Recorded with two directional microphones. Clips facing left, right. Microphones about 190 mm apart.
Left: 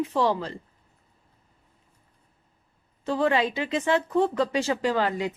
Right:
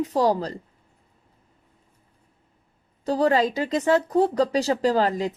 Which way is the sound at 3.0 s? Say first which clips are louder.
Right 3 dB; 40° right (ahead or behind).